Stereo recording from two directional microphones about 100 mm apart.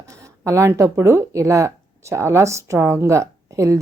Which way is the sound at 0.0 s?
30° right (ahead or behind).